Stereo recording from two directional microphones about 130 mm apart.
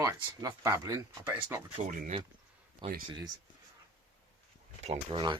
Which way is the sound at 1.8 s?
55° right (ahead or behind).